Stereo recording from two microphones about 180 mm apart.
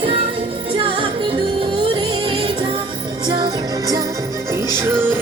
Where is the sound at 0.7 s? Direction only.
30° right (ahead or behind).